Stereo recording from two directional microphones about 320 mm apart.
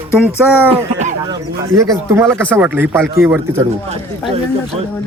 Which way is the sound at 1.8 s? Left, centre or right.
Centre.